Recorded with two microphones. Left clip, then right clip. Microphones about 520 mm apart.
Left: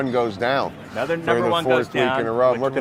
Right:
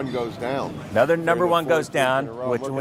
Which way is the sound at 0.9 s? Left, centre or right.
Right.